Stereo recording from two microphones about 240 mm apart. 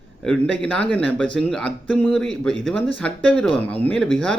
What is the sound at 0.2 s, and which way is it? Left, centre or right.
Speech, centre.